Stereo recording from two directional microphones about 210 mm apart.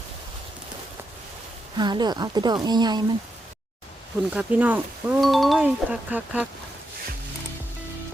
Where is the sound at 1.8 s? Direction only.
20° right (ahead or behind).